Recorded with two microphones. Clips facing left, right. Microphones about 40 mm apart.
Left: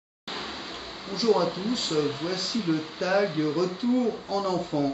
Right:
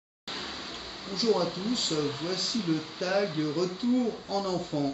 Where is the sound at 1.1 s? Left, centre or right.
Centre.